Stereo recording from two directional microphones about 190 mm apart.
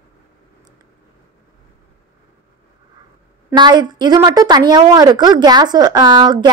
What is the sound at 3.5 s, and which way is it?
A woman's voice, 25° right (ahead or behind).